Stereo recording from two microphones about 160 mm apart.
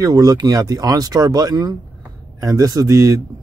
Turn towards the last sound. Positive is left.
turn(degrees=-20)  # may be behind; listen again after turning